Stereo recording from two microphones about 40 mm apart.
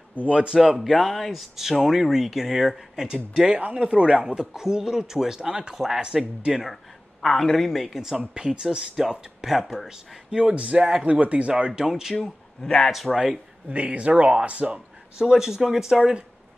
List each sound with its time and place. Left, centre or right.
0.3 s speech: right
0.6 s speech: centre
3.5 s speech: right
3.8 s speech: right
4.4 s speech: centre
6.7 s speech: centre
8.4 s speech: centre
10.4 s speech: right
11.5 s speech: right
11.9 s speech: centre
12.2 s speech: centre
12.9 s speech: centre
13.7 s speech: right
15.1 s speech: centre